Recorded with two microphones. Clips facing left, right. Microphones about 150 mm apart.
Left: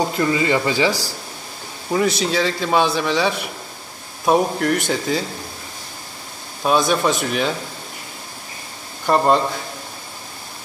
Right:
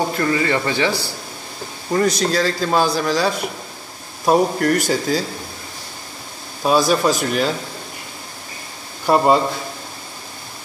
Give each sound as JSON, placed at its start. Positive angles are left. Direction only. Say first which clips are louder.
{"t": 0.1, "sound": "speech", "louder": "left 1 dB", "side_deg": 20}
{"t": 1.9, "sound": "a man's voice", "louder": "right 1 dB", "side_deg": 5}
{"t": 6.6, "sound": "a man's voice", "louder": "right 2 dB", "side_deg": -5}
{"t": 9.0, "sound": "speech", "louder": "right 1 dB", "side_deg": -10}